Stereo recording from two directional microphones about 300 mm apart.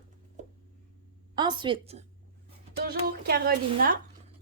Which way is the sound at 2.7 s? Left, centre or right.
Right.